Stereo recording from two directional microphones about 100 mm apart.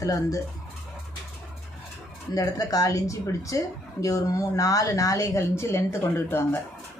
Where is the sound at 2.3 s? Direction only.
40° left (ahead or behind).